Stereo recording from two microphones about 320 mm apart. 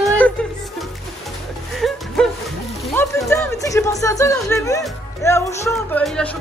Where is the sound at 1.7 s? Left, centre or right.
Centre.